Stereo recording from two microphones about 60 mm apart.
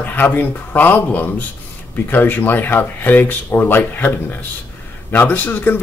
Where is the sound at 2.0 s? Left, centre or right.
Left.